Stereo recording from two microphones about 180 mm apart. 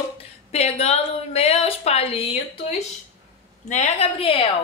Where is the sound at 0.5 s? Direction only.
35° left (ahead or behind).